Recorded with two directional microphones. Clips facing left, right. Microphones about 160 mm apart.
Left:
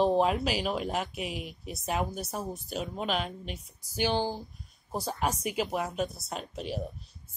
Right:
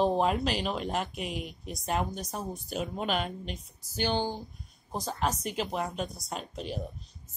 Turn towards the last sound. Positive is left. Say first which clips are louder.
# left 1 dB
turn(degrees=5)  # may be behind; listen again after turning